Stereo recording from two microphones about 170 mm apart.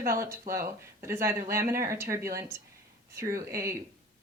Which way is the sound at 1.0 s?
15° right (ahead or behind).